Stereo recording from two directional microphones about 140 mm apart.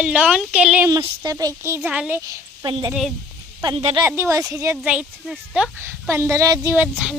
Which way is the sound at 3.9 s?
20° right (ahead or behind).